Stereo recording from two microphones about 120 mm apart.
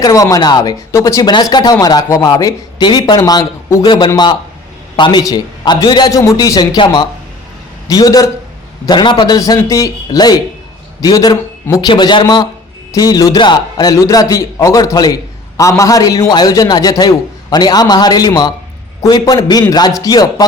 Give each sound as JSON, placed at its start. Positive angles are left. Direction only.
{"t": 0.0, "sound": "a man's voice", "side_deg": 30}
{"t": 11.9, "sound": "a man's voice", "side_deg": 40}